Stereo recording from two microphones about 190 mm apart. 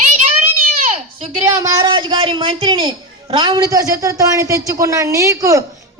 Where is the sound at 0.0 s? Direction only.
40° right (ahead or behind).